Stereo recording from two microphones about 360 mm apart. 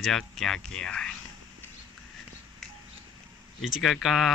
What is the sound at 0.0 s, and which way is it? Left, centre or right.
Speech, centre.